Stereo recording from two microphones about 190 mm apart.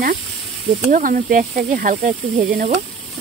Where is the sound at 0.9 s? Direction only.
45° right (ahead or behind).